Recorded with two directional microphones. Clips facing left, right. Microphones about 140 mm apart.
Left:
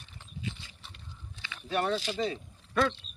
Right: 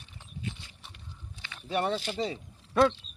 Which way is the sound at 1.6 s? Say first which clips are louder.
Right 1 dB; 20° right (ahead or behind).